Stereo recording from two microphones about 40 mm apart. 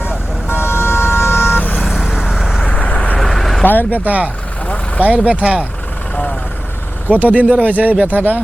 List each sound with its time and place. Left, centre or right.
0.0 s vehicle: left
1.5 s vehicle: left
1.9 s vehicle: centre
2.6 s vehicle: left
3.2 s vehicle: centre
3.6 s speech: left
4.0 s speech: right
7.1 s speech: right